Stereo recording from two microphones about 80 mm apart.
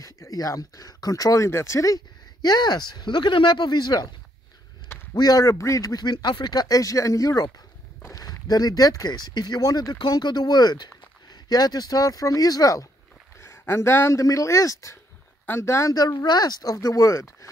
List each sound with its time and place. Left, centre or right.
0.0 s speech: left
2.4 s speech: left
5.1 s speech: left
9.9 s speech: left
13.4 s speech: left
15.9 s speech: left